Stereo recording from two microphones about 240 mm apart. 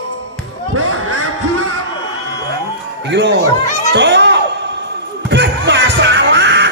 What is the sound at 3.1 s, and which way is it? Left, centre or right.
Music, right.